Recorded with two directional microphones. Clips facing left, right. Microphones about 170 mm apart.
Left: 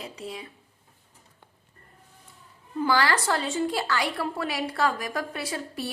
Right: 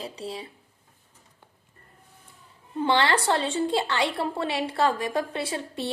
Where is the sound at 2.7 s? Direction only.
25° right (ahead or behind).